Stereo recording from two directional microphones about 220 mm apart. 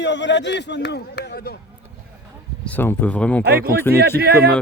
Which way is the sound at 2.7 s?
10° left (ahead or behind).